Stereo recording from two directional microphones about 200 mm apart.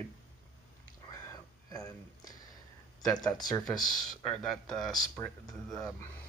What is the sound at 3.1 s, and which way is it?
Speech, 20° left (ahead or behind).